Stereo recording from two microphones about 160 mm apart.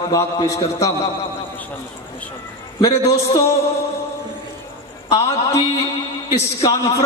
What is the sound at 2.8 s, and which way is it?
Speech, 25° left (ahead or behind).